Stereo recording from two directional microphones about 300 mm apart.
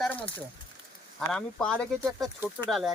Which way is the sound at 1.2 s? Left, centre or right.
Centre.